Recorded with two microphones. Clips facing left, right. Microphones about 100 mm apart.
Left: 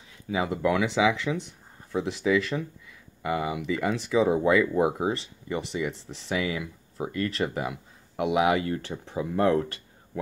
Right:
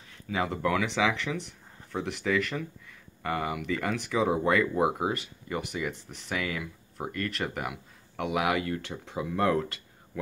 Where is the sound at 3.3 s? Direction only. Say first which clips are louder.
Left 3 dB; 20° left (ahead or behind).